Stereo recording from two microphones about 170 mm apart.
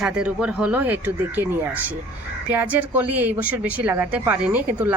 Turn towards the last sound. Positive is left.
turn(degrees=-10)  # may be behind; listen again after turning